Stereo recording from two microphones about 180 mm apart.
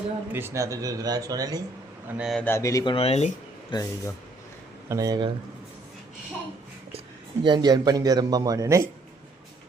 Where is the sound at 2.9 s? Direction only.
35° left (ahead or behind).